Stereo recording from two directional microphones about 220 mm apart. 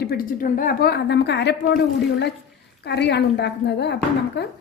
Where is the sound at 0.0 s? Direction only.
40° left (ahead or behind).